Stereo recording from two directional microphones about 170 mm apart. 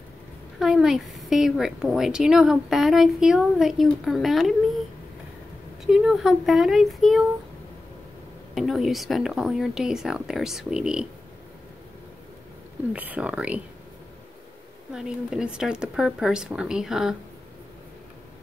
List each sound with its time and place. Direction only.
0.6 s a woman's voice: centre (ahead or behind)
5.9 s a woman's voice: 5° right (ahead or behind)
8.5 s a woman's voice: centre (ahead or behind)
12.9 s speech: 10° right (ahead or behind)
15.0 s a woman's voice: 5° right (ahead or behind)